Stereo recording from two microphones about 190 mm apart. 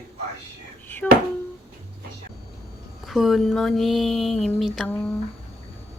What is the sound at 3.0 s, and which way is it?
Speech, centre (ahead or behind).